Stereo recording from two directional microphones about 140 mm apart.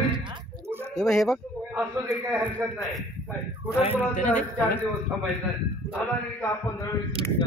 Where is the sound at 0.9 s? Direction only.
5° left (ahead or behind).